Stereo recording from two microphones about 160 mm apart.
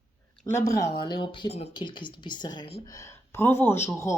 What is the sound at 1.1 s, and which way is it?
A woman's voice, 30° left (ahead or behind).